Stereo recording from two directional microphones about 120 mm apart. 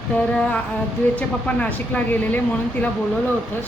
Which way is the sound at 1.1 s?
10° left (ahead or behind).